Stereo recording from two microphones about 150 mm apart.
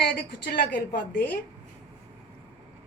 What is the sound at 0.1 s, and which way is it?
A woman's voice, 80° left.